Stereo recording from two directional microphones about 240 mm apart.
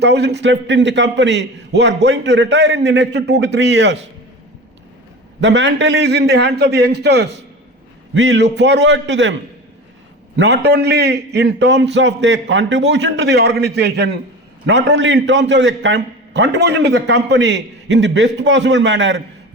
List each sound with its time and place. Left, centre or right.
0.0 s a man's voice: right
5.4 s a man's voice: right
10.3 s a man's voice: right